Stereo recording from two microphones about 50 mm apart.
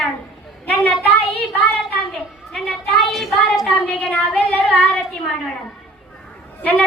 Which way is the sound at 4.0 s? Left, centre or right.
Left.